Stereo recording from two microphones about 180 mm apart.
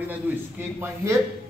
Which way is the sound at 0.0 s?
10° right (ahead or behind).